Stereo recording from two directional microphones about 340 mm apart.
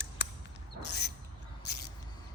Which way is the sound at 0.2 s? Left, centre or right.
Left.